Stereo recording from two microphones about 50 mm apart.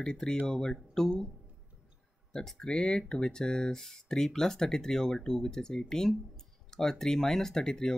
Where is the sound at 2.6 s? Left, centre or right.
Centre.